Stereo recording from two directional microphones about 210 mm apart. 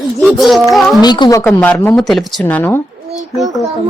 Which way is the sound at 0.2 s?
Centre (ahead or behind).